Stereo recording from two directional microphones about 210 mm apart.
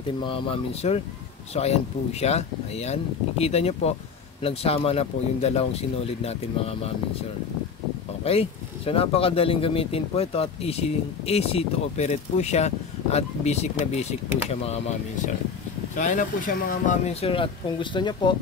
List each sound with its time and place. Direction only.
0.2 s speech: 25° left (ahead or behind)
8.2 s speech: 30° left (ahead or behind)